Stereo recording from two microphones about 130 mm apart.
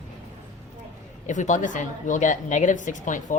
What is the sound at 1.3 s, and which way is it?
A woman's voice, 75° left (ahead or behind).